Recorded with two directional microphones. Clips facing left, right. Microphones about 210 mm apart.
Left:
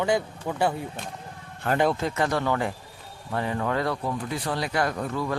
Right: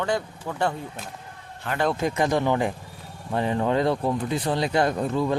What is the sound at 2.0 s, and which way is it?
Speech, 15° right (ahead or behind).